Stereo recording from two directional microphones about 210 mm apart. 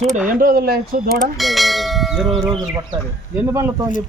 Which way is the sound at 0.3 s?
40° right (ahead or behind).